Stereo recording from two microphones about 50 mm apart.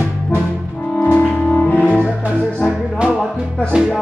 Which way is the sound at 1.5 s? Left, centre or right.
Left.